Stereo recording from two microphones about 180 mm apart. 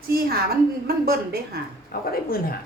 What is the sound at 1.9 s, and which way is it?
Speech, 55° left (ahead or behind).